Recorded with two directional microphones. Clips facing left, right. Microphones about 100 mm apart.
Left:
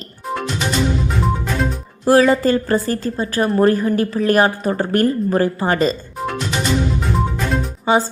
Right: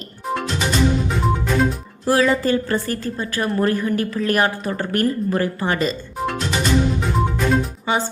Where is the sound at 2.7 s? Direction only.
30° left (ahead or behind).